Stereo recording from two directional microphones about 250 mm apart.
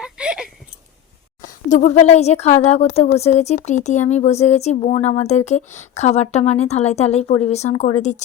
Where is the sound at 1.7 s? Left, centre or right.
Left.